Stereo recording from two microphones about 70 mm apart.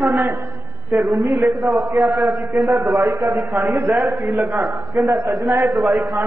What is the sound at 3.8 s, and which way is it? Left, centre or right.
A man's voice, right.